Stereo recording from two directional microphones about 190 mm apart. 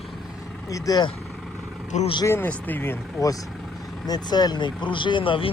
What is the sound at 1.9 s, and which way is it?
Speech, 35° left (ahead or behind).